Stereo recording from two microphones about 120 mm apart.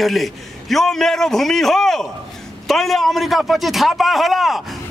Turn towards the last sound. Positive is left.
turn(degrees=0)  # may be behind; listen again after turning